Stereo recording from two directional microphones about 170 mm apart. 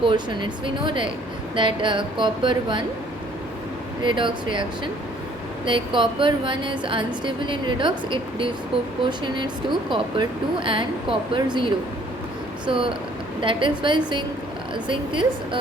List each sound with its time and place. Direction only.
0.0 s speech: 30° right (ahead or behind)
4.0 s speech: 30° right (ahead or behind)
5.6 s speech: 30° right (ahead or behind)